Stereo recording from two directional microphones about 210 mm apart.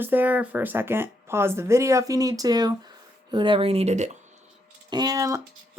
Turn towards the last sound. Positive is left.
turn(degrees=-15)  # may be behind; listen again after turning